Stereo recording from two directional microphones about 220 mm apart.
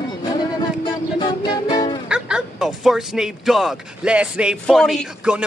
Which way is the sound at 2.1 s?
5° right (ahead or behind).